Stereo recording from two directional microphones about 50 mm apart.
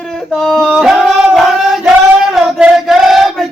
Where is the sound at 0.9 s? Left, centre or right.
Centre.